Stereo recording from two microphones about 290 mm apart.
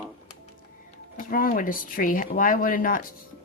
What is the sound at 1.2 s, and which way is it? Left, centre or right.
Speech, left.